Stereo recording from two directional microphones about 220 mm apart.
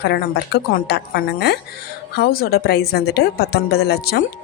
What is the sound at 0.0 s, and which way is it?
A woman's voice, 45° left (ahead or behind).